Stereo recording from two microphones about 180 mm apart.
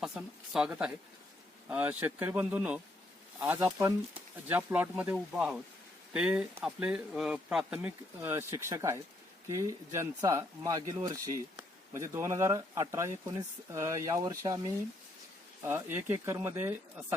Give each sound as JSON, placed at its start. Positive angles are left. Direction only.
{"t": 0.5, "sound": "speech", "side_deg": -5}
{"t": 15.6, "sound": "speech", "side_deg": -10}